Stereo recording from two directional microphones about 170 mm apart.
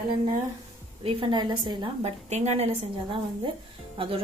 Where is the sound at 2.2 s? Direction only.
40° right (ahead or behind).